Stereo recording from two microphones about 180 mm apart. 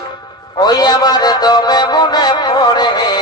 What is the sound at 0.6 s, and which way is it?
Music, 20° left (ahead or behind).